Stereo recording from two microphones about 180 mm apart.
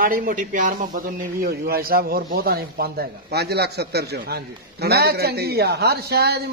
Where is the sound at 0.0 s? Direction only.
55° right (ahead or behind).